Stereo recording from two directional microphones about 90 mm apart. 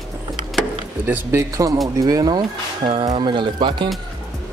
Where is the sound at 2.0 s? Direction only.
45° right (ahead or behind); by 3.8 s 65° right (ahead or behind).